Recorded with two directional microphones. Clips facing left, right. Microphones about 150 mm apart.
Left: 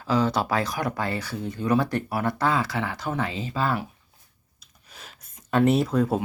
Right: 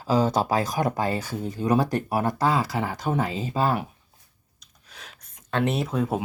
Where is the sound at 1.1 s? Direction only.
40° right (ahead or behind).